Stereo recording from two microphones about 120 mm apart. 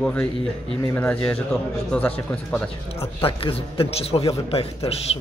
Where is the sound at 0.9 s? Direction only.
15° left (ahead or behind).